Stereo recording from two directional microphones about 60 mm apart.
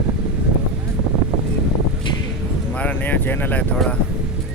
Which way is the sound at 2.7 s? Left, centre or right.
Left.